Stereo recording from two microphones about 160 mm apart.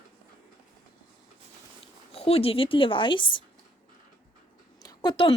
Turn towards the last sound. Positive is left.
turn(degrees=30)  # may be behind; listen again after turning